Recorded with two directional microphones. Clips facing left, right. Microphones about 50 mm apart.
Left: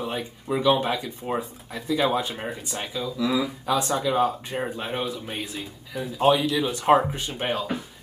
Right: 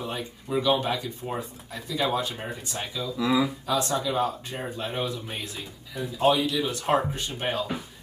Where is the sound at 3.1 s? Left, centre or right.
Centre.